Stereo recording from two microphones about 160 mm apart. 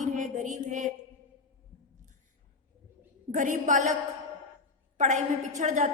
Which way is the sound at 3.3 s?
50° right (ahead or behind).